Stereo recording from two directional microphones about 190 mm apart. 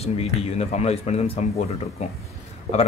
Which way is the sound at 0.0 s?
35° left (ahead or behind).